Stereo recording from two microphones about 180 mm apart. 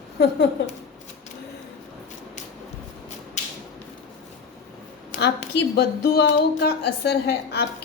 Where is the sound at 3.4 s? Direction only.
40° left (ahead or behind).